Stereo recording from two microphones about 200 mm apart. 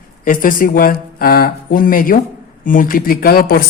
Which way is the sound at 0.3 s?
45° left (ahead or behind).